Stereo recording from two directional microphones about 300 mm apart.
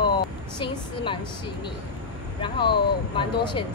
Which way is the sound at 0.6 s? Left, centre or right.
Centre.